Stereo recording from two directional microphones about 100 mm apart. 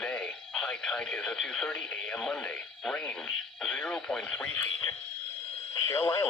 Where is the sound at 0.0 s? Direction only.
5° left (ahead or behind).